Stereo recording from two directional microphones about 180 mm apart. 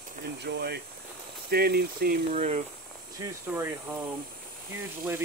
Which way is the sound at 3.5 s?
10° right (ahead or behind).